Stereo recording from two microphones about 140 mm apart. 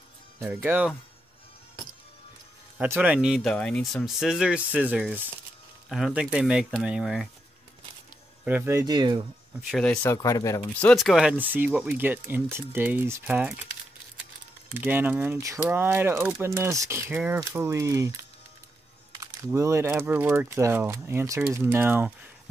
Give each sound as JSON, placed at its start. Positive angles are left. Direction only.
{"t": 0.4, "sound": "speech", "side_deg": -15}
{"t": 2.8, "sound": "speech", "side_deg": -10}
{"t": 3.5, "sound": "speech", "side_deg": 5}
{"t": 8.5, "sound": "speech", "side_deg": -10}
{"t": 8.7, "sound": "speech", "side_deg": -30}
{"t": 9.7, "sound": "speech", "side_deg": 5}
{"t": 10.0, "sound": "speech", "side_deg": 20}
{"t": 10.8, "sound": "speech", "side_deg": 5}
{"t": 14.7, "sound": "speech", "side_deg": -15}
{"t": 17.1, "sound": "speech", "side_deg": -10}
{"t": 17.4, "sound": "speech", "side_deg": -20}